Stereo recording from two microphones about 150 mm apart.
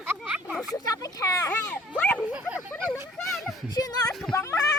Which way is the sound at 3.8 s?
25° left (ahead or behind).